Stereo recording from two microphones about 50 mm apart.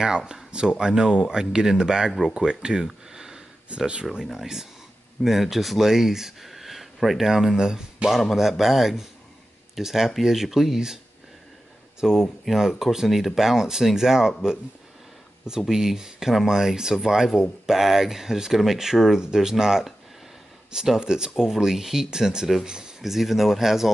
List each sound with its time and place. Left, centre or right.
0.5 s speech: centre
12.0 s speech: centre
15.4 s speech: centre